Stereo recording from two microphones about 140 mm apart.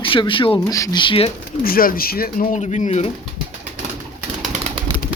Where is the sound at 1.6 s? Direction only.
90° left; by 3.1 s 55° left (ahead or behind).